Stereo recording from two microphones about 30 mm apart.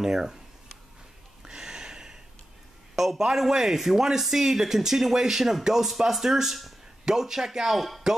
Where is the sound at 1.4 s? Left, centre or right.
Centre.